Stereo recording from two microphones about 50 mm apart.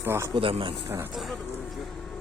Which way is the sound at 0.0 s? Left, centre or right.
Right.